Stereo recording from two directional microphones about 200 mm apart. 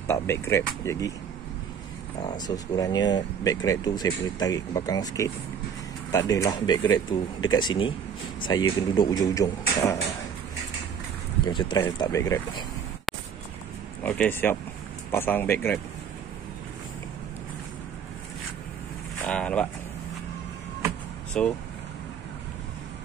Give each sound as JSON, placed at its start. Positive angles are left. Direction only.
{"t": 0.0, "sound": "speech", "side_deg": 15}
{"t": 2.2, "sound": "speech", "side_deg": 20}
{"t": 11.4, "sound": "speech", "side_deg": 20}
{"t": 13.1, "sound": "a sound", "side_deg": 0}
{"t": 14.0, "sound": "speech", "side_deg": 10}
{"t": 19.2, "sound": "a sound", "side_deg": 5}
{"t": 21.4, "sound": "speech", "side_deg": 5}